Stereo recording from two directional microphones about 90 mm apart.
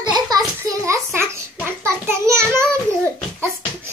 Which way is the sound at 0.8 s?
30° right (ahead or behind).